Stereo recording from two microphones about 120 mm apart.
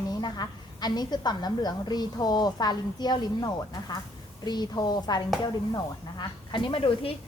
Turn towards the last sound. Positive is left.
turn(degrees=50)  # may be behind; listen again after turning